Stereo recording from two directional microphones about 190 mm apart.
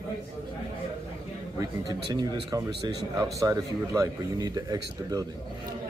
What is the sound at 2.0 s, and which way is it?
Speech, 25° right (ahead or behind).